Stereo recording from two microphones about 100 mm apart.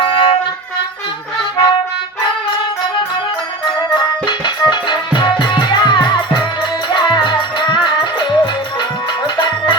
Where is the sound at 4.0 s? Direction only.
50° left (ahead or behind).